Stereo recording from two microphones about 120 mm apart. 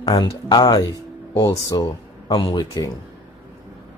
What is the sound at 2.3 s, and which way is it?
Speech, 45° left (ahead or behind).